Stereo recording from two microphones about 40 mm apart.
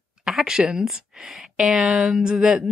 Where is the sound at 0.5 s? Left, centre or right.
Centre.